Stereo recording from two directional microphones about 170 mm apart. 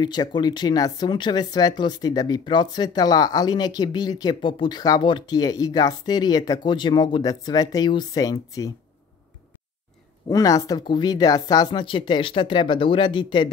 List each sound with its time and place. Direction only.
0.0 s speech: 25° left (ahead or behind)
10.2 s speech: 20° left (ahead or behind)